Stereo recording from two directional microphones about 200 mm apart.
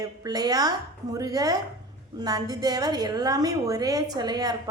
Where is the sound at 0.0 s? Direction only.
20° right (ahead or behind).